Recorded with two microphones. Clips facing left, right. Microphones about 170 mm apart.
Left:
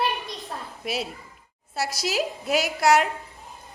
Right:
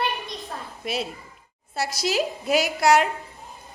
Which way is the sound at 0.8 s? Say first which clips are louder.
Right 1 dB; 5° left (ahead or behind).